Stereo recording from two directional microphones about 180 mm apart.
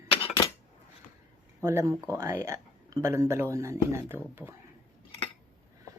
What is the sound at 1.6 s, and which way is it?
Speech, 15° right (ahead or behind).